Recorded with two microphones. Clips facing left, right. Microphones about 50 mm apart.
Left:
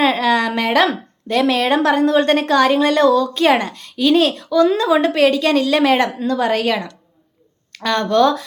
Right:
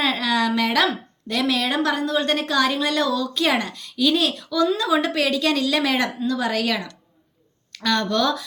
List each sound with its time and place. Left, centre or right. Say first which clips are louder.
0.0 s a woman's voice: left 6 dB; left